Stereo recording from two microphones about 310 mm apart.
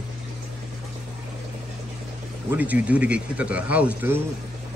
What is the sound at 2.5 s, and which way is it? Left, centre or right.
A man's voice, centre.